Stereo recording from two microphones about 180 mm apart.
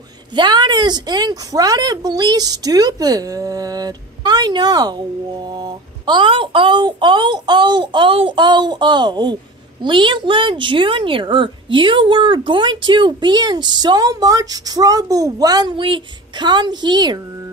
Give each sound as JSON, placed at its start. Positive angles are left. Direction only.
{"t": 0.4, "sound": "a woman's voice", "side_deg": -25}